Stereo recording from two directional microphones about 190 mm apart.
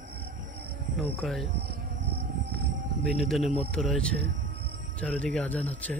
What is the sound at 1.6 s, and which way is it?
Insect, 55° right (ahead or behind).